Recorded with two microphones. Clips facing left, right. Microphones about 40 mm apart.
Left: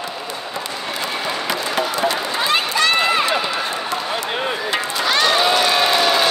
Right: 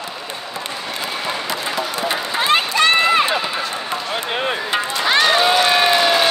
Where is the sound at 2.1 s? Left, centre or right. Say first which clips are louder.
Right 2 dB; right.